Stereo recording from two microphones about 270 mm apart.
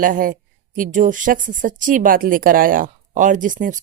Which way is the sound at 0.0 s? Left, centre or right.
Right.